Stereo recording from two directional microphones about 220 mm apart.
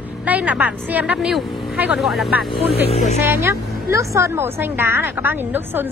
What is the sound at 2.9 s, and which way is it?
Speech, 30° left (ahead or behind).